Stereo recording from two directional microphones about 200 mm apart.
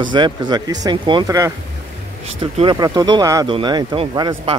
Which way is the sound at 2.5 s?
25° right (ahead or behind).